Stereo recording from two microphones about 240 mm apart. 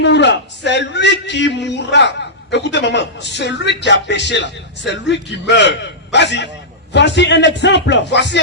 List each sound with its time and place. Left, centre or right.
0.0 s a man's voice: left